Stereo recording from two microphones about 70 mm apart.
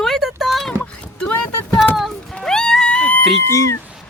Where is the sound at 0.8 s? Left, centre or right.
Centre.